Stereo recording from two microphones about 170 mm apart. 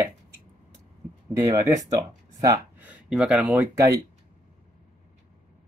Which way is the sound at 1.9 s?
20° right (ahead or behind).